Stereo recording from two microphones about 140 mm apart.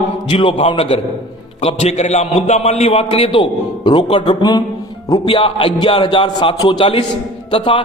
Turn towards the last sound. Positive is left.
turn(degrees=40)  # may be behind; listen again after turning